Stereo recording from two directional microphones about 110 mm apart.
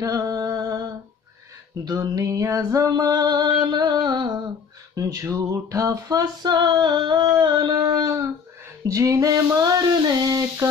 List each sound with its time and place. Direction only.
0.0 s music: 30° right (ahead or behind)
1.9 s female singing: 30° right (ahead or behind)
5.2 s female singing: 30° right (ahead or behind)